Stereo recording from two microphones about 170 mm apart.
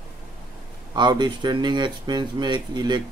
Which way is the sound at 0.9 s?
25° right (ahead or behind).